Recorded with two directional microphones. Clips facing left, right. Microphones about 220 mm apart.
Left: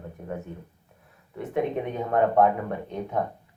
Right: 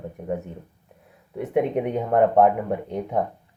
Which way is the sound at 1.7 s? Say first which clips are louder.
Right 6 dB; 70° right (ahead or behind).